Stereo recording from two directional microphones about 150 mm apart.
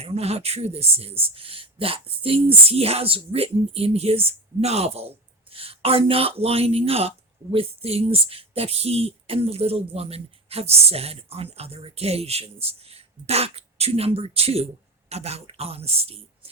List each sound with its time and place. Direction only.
0.0 s speech: 45° right (ahead or behind)